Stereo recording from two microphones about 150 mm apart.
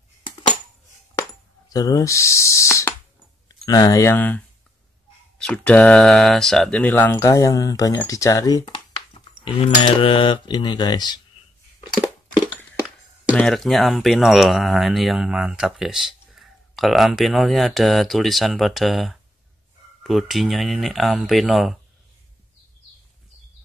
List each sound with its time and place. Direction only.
1.7 s speech: 25° left (ahead or behind)
5.4 s speech: 5° left (ahead or behind); by 11.1 s 30° left (ahead or behind)
13.4 s speech: centre (ahead or behind)